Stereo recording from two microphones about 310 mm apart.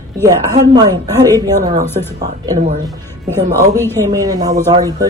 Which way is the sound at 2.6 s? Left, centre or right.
Right.